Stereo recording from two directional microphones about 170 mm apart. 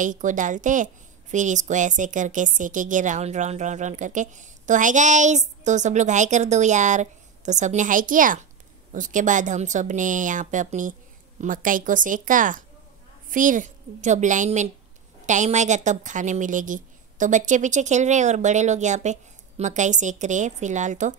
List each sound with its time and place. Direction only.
0.0 s a woman's voice: 50° right (ahead or behind)